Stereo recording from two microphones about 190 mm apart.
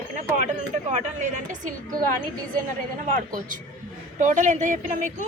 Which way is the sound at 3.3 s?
45° right (ahead or behind).